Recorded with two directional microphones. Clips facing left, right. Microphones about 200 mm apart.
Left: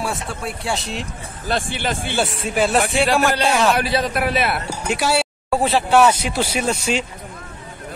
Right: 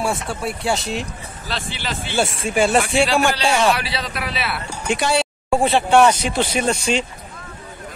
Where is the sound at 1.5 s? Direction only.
50° left (ahead or behind).